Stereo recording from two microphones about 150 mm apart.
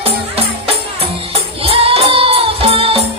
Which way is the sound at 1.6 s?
40° right (ahead or behind).